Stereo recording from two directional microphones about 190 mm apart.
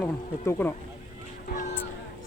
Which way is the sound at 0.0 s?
10° left (ahead or behind).